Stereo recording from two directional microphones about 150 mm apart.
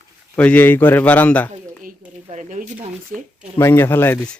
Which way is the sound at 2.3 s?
55° right (ahead or behind).